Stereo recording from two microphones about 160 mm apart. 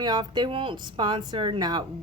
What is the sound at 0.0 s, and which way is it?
Speech, 25° right (ahead or behind).